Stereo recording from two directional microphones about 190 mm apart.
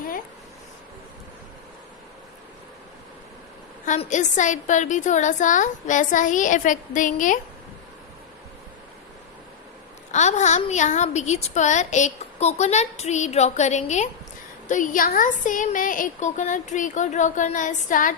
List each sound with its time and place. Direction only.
3.8 s a woman's voice: 40° left (ahead or behind)
10.1 s a woman's voice: 40° left (ahead or behind)